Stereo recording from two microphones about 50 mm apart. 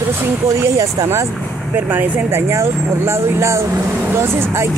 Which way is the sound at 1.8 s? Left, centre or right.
Right.